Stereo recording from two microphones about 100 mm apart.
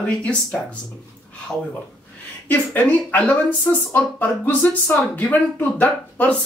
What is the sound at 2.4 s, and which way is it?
Speech, 15° left (ahead or behind).